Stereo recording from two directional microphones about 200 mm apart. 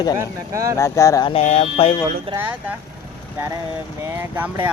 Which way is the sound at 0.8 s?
15° left (ahead or behind).